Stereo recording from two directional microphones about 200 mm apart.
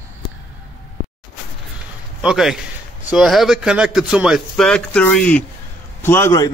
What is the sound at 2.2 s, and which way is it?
A man's voice, centre (ahead or behind).